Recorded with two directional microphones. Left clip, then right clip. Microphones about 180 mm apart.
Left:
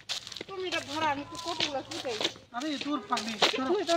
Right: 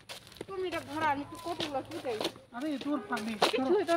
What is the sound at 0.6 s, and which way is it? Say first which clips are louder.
Speech: left 2 dB; 40° left (ahead or behind).